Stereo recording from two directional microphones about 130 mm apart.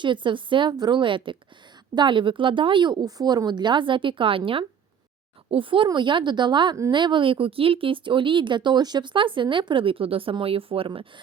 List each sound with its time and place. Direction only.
0.0 s speech: 40° right (ahead or behind)